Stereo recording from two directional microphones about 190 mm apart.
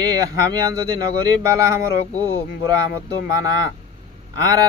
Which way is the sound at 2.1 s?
10° left (ahead or behind).